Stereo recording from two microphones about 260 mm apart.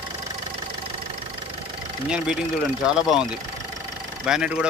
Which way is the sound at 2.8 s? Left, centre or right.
Centre.